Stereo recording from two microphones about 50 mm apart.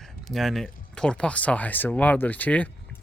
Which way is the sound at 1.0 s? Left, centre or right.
Centre.